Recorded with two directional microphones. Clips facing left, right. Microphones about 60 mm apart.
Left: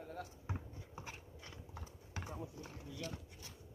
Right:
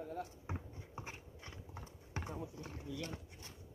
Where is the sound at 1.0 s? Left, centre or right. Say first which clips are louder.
Right 2 dB; right.